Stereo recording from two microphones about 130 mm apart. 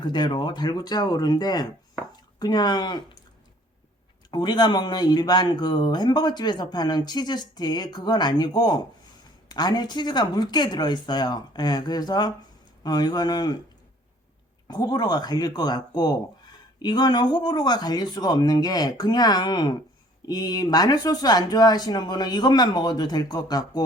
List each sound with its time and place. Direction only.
0.0 s speech: 35° left (ahead or behind)
4.3 s speech: 35° left (ahead or behind)
14.7 s speech: 30° left (ahead or behind)